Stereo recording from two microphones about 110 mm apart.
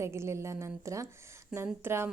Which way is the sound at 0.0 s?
25° right (ahead or behind).